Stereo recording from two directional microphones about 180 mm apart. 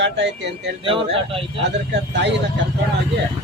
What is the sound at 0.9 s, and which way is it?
Speech, 30° right (ahead or behind).